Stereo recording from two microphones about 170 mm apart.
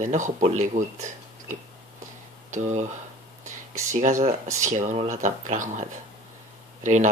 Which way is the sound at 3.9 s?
50° right (ahead or behind).